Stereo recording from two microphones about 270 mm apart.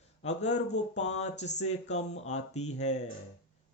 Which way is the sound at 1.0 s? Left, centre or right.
Left.